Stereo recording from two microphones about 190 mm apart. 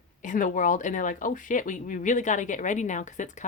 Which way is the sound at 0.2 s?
45° left (ahead or behind).